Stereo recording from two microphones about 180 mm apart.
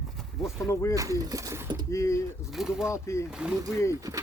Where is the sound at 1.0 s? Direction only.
20° right (ahead or behind).